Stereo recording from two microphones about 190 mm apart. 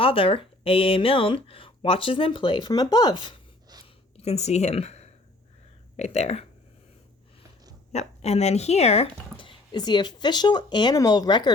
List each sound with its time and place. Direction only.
0.0 s speech: 30° left (ahead or behind)
4.2 s speech: 35° left (ahead or behind)
7.9 s speech: 35° left (ahead or behind)